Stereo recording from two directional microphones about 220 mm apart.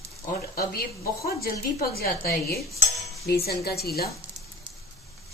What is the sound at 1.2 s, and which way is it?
A woman's voice, 45° left (ahead or behind).